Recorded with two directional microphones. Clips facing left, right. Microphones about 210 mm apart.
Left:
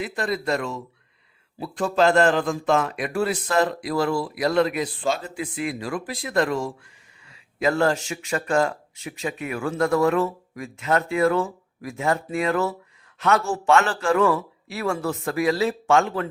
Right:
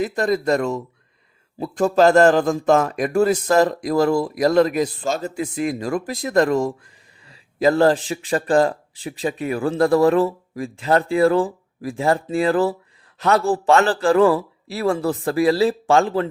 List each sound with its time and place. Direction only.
0.0 s a man's voice: 45° right (ahead or behind)